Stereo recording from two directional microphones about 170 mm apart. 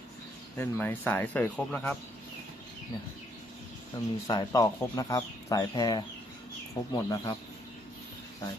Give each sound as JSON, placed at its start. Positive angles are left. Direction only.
{"t": 0.5, "sound": "speech", "side_deg": 10}
{"t": 3.9, "sound": "speech", "side_deg": 25}